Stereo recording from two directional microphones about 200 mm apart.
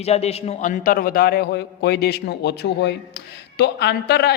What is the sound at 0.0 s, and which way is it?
A man's voice, 30° left (ahead or behind).